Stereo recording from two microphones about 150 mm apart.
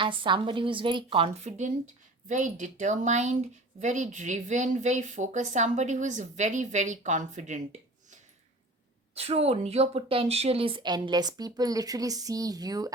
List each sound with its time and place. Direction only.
0.0 s speech: 35° right (ahead or behind)
1.5 s a woman's voice: 50° right (ahead or behind)
9.1 s speech: 45° right (ahead or behind); by 12.9 s 25° right (ahead or behind)